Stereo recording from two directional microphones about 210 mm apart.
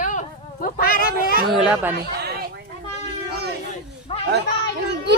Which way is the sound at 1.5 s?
5° right (ahead or behind).